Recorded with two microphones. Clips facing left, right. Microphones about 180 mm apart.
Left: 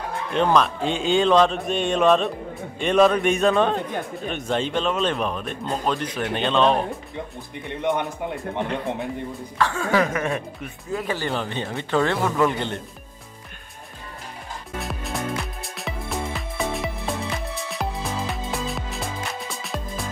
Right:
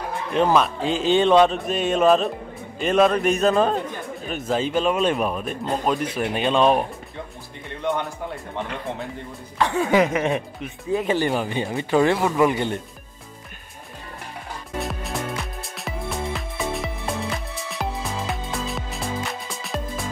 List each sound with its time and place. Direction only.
0.3 s a man's voice: 5° right (ahead or behind)
7.8 s speech: 20° left (ahead or behind)
9.6 s speech: 20° right (ahead or behind)
14.8 s music: centre (ahead or behind)